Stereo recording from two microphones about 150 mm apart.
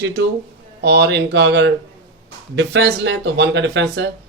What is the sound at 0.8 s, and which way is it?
Speech, 90° right.